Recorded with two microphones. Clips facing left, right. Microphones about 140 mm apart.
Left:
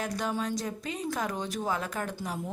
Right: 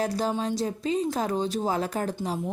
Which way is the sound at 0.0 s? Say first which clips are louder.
Right 5 dB; 30° right (ahead or behind).